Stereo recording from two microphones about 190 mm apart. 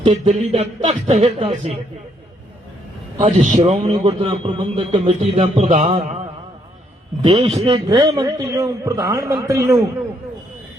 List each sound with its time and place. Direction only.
0.0 s a man's voice: 35° right (ahead or behind)
3.2 s a man's voice: 40° right (ahead or behind)
7.2 s a man's voice: 25° right (ahead or behind)